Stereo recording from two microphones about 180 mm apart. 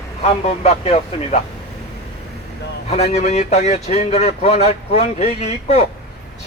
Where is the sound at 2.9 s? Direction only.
35° left (ahead or behind).